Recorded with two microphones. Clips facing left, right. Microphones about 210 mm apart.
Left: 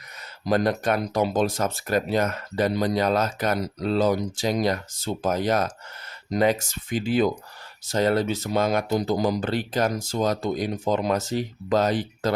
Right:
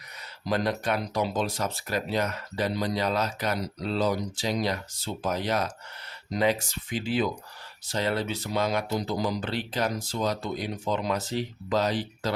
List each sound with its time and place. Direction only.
0.4 s speech: 45° left (ahead or behind)